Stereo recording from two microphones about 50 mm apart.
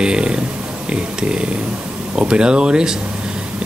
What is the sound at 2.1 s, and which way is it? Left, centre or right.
Speech, centre.